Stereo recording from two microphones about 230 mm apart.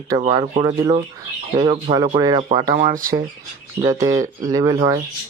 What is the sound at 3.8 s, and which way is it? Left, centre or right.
Speech, centre.